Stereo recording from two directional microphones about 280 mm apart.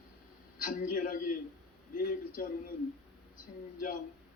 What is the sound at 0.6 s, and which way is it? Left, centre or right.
Speech, left.